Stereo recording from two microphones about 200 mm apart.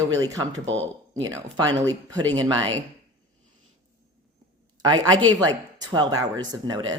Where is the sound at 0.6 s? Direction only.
70° right (ahead or behind).